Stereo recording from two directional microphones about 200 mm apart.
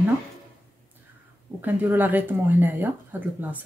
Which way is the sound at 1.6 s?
10° right (ahead or behind).